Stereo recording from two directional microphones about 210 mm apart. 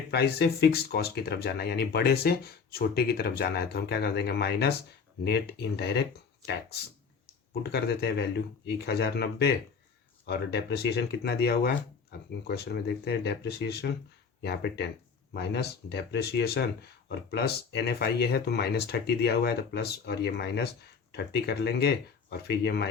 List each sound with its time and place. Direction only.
0.1 s speech: 50° left (ahead or behind)
7.6 s speech: 50° left (ahead or behind)